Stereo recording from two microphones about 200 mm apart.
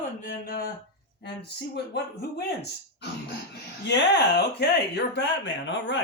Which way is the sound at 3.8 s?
60° left (ahead or behind).